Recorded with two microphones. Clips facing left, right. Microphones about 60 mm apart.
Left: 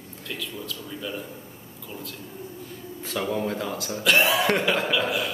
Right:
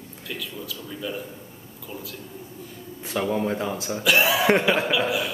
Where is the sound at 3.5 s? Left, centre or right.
Right.